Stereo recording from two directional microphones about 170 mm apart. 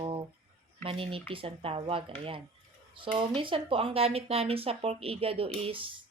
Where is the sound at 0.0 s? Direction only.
30° right (ahead or behind).